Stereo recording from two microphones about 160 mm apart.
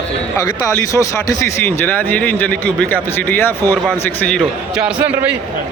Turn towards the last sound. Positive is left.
turn(degrees=-10)  # may be behind; listen again after turning